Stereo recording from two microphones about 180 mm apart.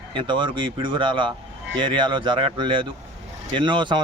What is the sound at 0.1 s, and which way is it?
A man's voice, 25° right (ahead or behind).